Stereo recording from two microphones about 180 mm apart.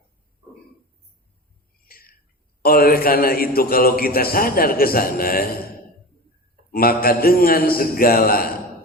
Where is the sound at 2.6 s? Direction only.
55° left (ahead or behind).